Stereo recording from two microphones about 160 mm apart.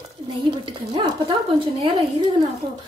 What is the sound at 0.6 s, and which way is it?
Speech, 30° right (ahead or behind).